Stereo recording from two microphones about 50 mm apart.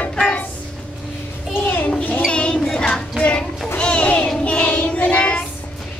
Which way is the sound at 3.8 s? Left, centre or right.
Left.